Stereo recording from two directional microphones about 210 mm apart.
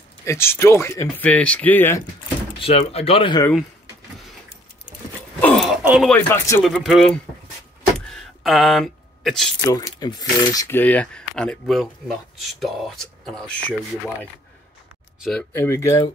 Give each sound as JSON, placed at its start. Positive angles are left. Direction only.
{"t": 0.2, "sound": "speech", "side_deg": 10}
{"t": 2.6, "sound": "speech", "side_deg": 30}
{"t": 5.4, "sound": "speech", "side_deg": 0}
{"t": 6.6, "sound": "cutlery", "side_deg": 0}
{"t": 8.1, "sound": "a sound", "side_deg": 0}
{"t": 9.7, "sound": "cutlery", "side_deg": 15}
{"t": 15.1, "sound": "speech", "side_deg": 0}
{"t": 15.5, "sound": "speech", "side_deg": 10}